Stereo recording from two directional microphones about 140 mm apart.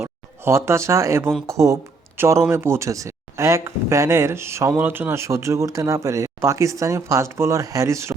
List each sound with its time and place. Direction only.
0.0 s speech: 20° right (ahead or behind)